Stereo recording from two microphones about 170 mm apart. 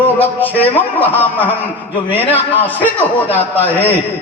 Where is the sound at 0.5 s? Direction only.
35° left (ahead or behind).